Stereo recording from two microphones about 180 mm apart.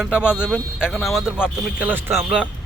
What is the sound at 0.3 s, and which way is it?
Speech, 5° right (ahead or behind).